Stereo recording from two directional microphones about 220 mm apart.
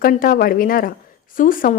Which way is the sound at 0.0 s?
40° left (ahead or behind).